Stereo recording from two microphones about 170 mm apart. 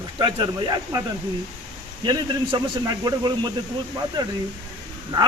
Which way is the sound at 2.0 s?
25° right (ahead or behind).